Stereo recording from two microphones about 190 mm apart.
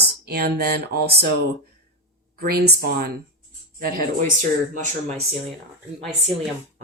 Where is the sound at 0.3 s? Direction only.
55° right (ahead or behind).